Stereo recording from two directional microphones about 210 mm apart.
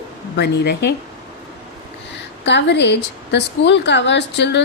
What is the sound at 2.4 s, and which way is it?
A woman's voice, 55° left (ahead or behind).